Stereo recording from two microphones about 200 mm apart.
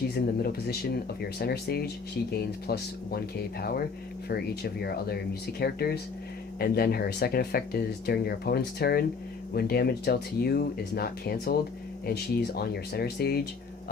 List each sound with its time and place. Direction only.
0.1 s speech: 50° left (ahead or behind)